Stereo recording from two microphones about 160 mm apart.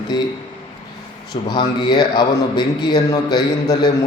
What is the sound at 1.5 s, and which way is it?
A man's voice, 25° left (ahead or behind).